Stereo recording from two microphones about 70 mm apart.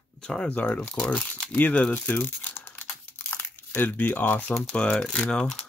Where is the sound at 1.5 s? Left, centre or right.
Left.